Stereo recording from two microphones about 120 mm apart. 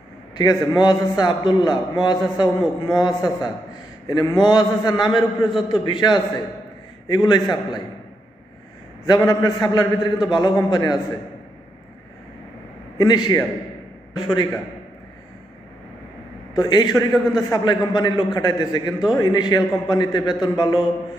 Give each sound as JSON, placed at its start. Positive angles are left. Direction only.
{"t": 0.4, "sound": "a man's voice", "side_deg": 35}
{"t": 9.0, "sound": "a man's voice", "side_deg": 30}
{"t": 12.9, "sound": "a man's voice", "side_deg": 35}
{"t": 16.5, "sound": "a man's voice", "side_deg": 35}